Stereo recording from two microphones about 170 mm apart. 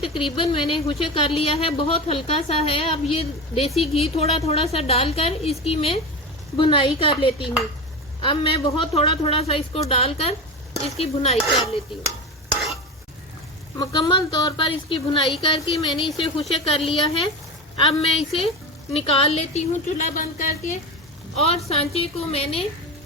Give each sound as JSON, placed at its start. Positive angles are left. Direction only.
{"t": 0.0, "sound": "a woman's voice", "side_deg": 30}
{"t": 13.7, "sound": "a woman's voice", "side_deg": 25}
{"t": 21.3, "sound": "a woman's voice", "side_deg": 40}